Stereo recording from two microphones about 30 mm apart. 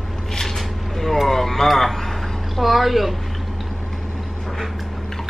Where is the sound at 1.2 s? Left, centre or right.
Centre.